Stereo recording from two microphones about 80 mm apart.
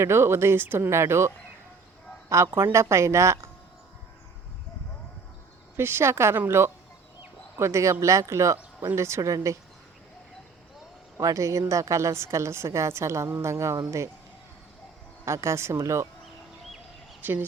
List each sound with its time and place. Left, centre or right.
0.0 s a woman's voice: right
2.4 s a woman's voice: right
5.7 s a woman's voice: right
7.2 s fowl: right
8.0 s a woman's voice: right
11.2 s a woman's voice: right
15.2 s a woman's voice: right
17.2 s speech: right